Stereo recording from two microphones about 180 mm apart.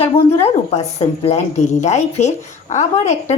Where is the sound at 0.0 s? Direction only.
35° left (ahead or behind).